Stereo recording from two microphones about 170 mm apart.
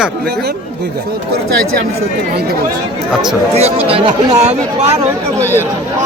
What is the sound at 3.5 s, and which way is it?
Speech, 35° right (ahead or behind).